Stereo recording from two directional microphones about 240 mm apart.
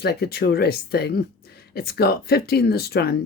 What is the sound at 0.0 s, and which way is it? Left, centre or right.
Speech, left.